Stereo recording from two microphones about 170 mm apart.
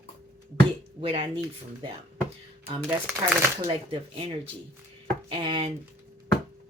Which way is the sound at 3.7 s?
35° right (ahead or behind).